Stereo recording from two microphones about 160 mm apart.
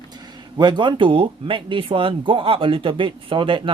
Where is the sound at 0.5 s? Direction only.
30° right (ahead or behind).